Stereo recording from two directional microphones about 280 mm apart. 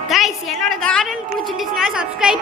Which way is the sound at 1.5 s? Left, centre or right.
Centre.